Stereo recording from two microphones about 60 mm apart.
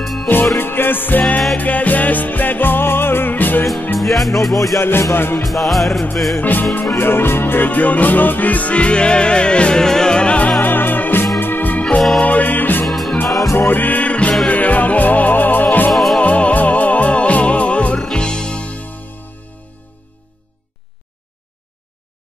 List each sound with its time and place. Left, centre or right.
0.0 s music: centre
0.6 s music: left
4.0 s music: centre
4.7 s music: left
5.4 s music: centre
6.3 s music: left
10.6 s music: left
11.3 s organ: left
12.2 s music: left
12.8 s music: centre
13.6 s music: left
15.9 s music: centre
16.2 s music: left